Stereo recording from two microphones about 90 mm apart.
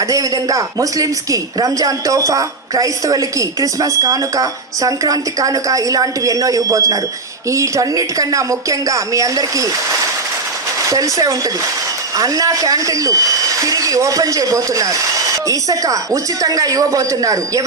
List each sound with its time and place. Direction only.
0.1 s speech: 40° right (ahead or behind)
10.8 s speech: 40° right (ahead or behind)